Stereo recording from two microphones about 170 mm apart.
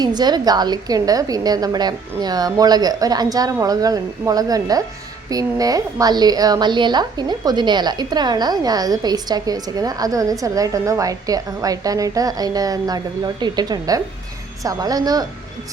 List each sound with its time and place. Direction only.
0.0 s a woman's voice: 25° right (ahead or behind)